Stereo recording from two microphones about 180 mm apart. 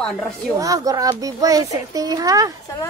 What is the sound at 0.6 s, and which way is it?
Speech, 20° right (ahead or behind).